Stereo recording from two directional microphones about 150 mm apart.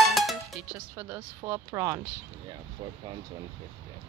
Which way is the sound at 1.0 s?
15° right (ahead or behind).